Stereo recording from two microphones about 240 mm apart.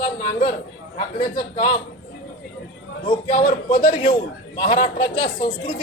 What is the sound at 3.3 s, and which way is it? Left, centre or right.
Speech, left.